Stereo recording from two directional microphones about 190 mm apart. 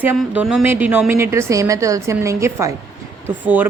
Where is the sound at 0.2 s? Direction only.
Centre (ahead or behind).